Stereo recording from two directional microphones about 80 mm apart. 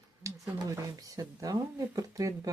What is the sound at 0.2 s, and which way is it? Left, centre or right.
Speech, right.